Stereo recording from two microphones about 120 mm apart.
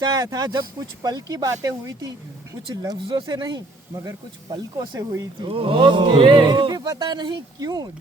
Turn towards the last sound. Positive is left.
turn(degrees=-35)  # may be behind; listen again after turning